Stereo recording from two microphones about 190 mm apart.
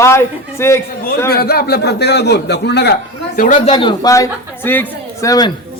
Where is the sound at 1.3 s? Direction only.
55° left (ahead or behind).